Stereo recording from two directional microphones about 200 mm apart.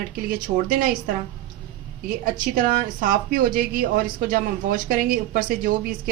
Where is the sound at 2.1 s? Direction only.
45° right (ahead or behind).